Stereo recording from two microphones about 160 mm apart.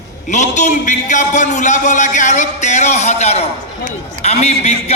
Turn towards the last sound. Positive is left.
turn(degrees=40)  # may be behind; listen again after turning